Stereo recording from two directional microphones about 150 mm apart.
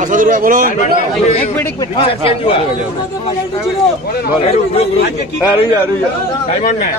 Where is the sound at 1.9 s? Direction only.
40° left (ahead or behind).